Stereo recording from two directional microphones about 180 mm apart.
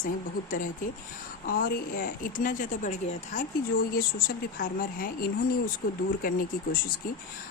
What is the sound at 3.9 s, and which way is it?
Speech, 55° left (ahead or behind).